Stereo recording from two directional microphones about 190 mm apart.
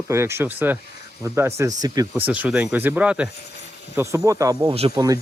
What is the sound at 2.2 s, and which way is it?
Speech, 10° right (ahead or behind).